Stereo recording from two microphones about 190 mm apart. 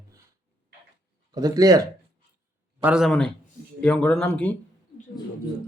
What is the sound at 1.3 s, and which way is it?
Speech, 20° right (ahead or behind).